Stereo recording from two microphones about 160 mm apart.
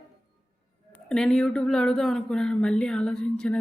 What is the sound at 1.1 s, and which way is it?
Speech, 5° left (ahead or behind).